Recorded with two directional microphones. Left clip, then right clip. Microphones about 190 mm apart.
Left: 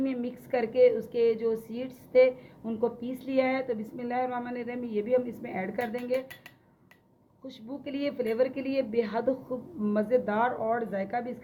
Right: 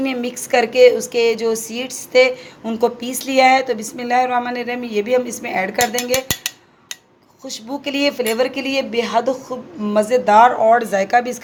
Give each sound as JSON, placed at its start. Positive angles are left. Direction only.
{"t": 0.0, "sound": "a woman's voice", "side_deg": -30}
{"t": 7.4, "sound": "a woman's voice", "side_deg": -30}